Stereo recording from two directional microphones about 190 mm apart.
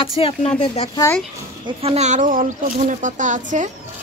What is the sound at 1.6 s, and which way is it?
Speech, 30° right (ahead or behind).